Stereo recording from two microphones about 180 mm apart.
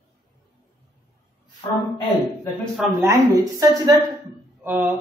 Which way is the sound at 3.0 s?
20° right (ahead or behind).